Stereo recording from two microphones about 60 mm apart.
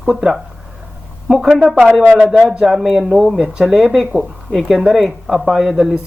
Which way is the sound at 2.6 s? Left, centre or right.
Centre.